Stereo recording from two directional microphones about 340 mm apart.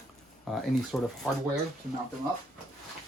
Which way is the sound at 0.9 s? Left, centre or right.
Centre.